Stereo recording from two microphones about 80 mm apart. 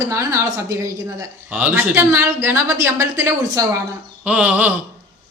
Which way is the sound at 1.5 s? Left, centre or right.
Centre.